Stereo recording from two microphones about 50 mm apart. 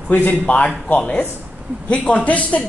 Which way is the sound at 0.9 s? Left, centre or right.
Left.